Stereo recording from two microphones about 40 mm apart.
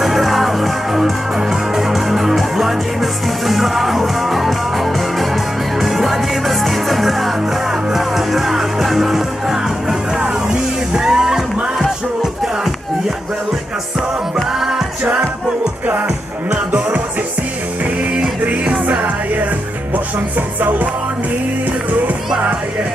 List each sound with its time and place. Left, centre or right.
0.0 s music: centre
10.2 s music: centre
18.4 s music: right
20.3 s music: right